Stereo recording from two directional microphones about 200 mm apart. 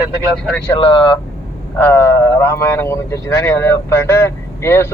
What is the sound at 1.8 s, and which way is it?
Speech, 10° left (ahead or behind).